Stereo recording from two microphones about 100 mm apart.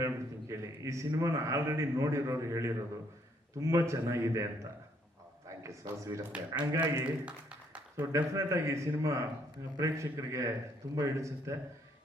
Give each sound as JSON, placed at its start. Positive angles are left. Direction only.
{"t": 0.0, "sound": "a man's voice", "side_deg": -30}
{"t": 5.5, "sound": "a man's voice", "side_deg": -30}
{"t": 6.7, "sound": "a man's voice", "side_deg": -15}
{"t": 7.9, "sound": "a man's voice", "side_deg": -30}